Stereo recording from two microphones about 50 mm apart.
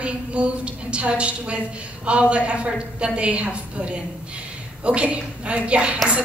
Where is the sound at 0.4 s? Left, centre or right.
Right.